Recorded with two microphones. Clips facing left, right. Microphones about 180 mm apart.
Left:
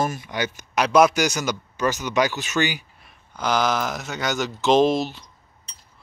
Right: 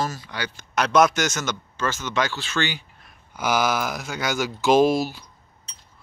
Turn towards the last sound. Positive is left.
turn(degrees=-5)  # may be behind; listen again after turning